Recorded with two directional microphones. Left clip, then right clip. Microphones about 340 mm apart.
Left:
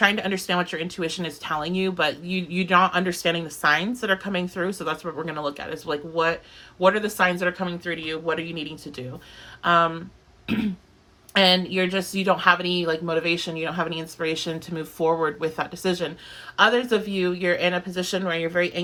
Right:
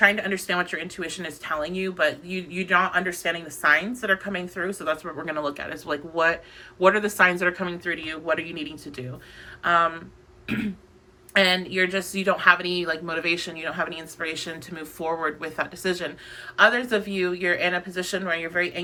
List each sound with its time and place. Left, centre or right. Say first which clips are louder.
0.0 s speech: right 1 dB; centre
10.4 s throat clearing: left 2 dB; centre
11.3 s speech: left 1 dB; centre